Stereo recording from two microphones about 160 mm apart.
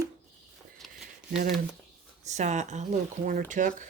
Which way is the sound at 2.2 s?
45° right (ahead or behind).